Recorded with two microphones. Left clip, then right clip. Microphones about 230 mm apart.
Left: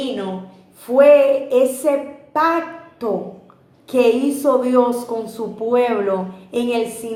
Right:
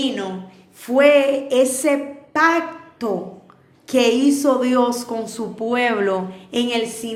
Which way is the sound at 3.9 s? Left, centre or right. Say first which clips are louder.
Left 1 dB; right.